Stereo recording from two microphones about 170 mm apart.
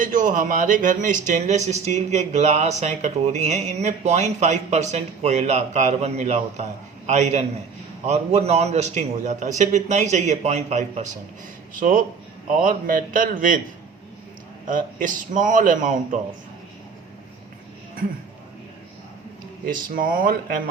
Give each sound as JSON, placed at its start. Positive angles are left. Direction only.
{"t": 0.0, "sound": "a man's voice", "side_deg": -50}
{"t": 14.7, "sound": "a man's voice", "side_deg": -50}
{"t": 19.6, "sound": "speech", "side_deg": -55}